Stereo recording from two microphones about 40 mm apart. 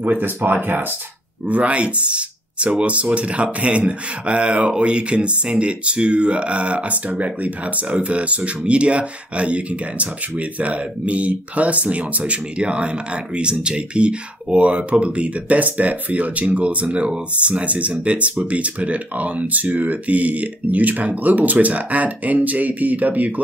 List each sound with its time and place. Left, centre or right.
0.2 s speech: right
1.5 s speech: right
12.5 s speech: right